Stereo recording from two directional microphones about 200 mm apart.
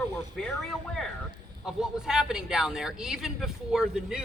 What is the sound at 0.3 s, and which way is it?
Speech, centre (ahead or behind).